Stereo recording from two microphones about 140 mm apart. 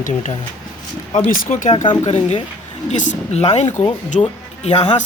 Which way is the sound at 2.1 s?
45° left (ahead or behind).